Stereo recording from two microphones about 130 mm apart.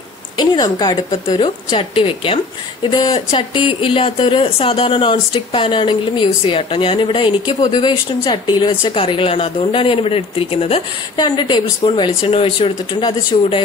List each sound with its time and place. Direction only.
0.4 s speech: 30° left (ahead or behind)
1.4 s a woman's voice: 45° left (ahead or behind)
11.1 s speech: 35° left (ahead or behind)